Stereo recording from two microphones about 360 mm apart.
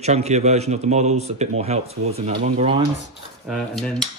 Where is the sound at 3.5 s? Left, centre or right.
Centre.